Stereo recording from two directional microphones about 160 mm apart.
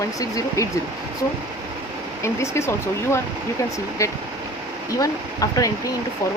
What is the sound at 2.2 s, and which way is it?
Speech, 15° left (ahead or behind).